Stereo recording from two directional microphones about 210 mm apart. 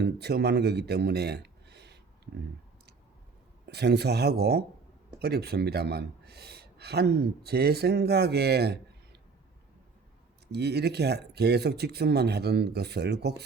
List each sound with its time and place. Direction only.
0.0 s speech: 50° right (ahead or behind)
3.7 s a man's voice: 50° right (ahead or behind)
10.5 s a man's voice: 50° right (ahead or behind)